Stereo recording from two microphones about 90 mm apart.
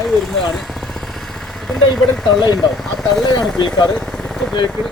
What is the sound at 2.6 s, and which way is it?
Speech, 5° left (ahead or behind).